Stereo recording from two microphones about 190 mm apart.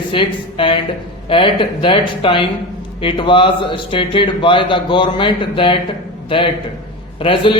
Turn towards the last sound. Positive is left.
turn(degrees=30)  # may be behind; listen again after turning